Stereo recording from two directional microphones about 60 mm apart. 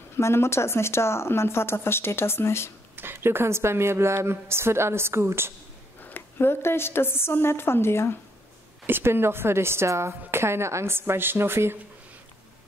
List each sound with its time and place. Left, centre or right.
0.2 s speech: left
3.0 s a woman's voice: right
6.0 s speech: left
8.8 s a woman's voice: right